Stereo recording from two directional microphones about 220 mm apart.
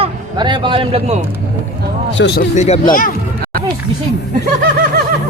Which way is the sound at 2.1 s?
50° left (ahead or behind).